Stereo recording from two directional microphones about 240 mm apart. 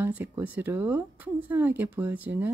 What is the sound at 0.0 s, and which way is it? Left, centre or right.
Speech, centre.